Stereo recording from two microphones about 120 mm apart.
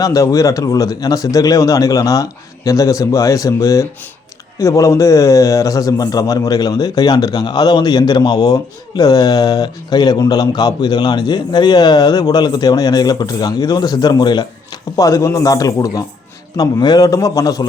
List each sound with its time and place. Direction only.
0.0 s a man's voice: 30° left (ahead or behind)